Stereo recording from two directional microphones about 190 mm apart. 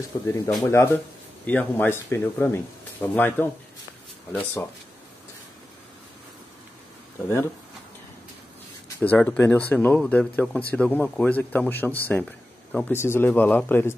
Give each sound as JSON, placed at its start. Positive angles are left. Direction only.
{"t": 0.1, "sound": "speech", "side_deg": 30}
{"t": 0.7, "sound": "speech", "side_deg": 10}
{"t": 8.8, "sound": "speech", "side_deg": 10}